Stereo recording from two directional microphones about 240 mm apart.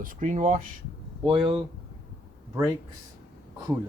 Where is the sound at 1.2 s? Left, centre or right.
Right.